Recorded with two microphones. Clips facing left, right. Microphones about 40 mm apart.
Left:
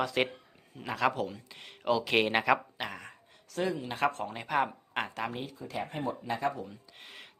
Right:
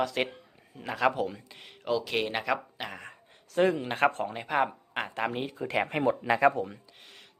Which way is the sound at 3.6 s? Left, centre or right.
Right.